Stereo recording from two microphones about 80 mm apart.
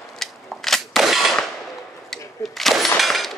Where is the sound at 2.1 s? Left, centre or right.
Centre.